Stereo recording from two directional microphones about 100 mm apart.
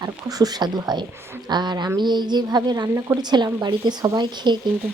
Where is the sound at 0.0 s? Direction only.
40° right (ahead or behind).